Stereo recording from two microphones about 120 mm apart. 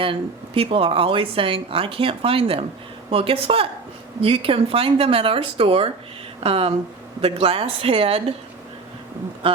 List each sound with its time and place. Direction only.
0.0 s speech: 50° right (ahead or behind)